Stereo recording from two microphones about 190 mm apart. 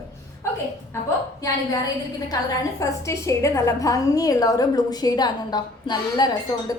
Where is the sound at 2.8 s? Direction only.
15° left (ahead or behind).